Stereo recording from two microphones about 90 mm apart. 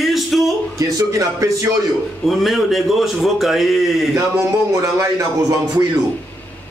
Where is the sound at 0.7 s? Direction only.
40° right (ahead or behind).